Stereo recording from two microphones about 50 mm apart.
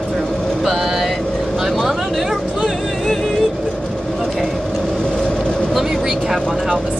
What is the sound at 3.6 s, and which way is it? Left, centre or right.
Vehicle, centre.